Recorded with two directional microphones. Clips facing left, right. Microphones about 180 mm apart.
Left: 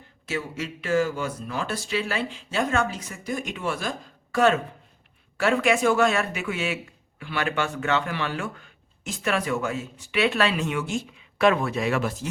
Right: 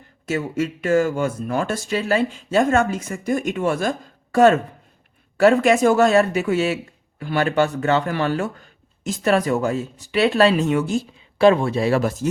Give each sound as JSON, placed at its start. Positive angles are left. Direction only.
{"t": 0.3, "sound": "speech", "side_deg": -45}